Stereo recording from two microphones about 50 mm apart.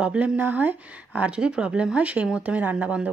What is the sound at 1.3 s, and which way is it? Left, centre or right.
Speech, right.